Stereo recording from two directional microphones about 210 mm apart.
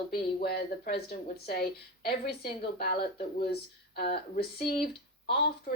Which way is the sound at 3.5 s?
50° left (ahead or behind).